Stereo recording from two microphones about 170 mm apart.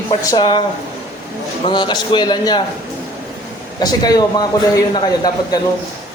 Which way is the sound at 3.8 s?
25° left (ahead or behind).